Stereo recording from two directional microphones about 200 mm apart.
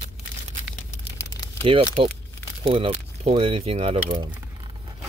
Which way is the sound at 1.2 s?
15° left (ahead or behind).